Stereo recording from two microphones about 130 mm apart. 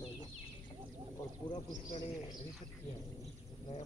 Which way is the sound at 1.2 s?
30° left (ahead or behind).